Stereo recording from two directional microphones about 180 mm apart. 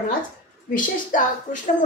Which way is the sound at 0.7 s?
45° left (ahead or behind).